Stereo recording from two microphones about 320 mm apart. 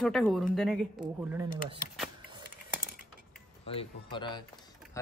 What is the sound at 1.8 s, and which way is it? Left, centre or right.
Speech, left.